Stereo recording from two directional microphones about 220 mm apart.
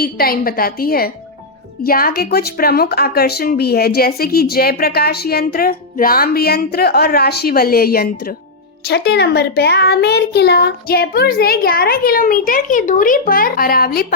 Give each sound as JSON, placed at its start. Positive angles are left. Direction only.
{"t": 0.0, "sound": "speech", "side_deg": 40}